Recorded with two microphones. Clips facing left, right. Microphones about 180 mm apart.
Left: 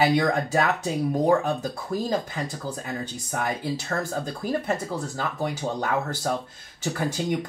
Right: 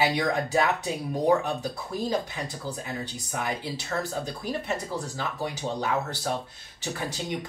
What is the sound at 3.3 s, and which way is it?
Speech, 50° left (ahead or behind).